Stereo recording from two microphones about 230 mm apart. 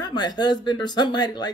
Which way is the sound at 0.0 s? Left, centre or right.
Centre.